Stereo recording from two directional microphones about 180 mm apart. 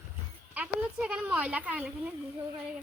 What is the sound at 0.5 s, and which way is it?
A woman's voice, 5° right (ahead or behind).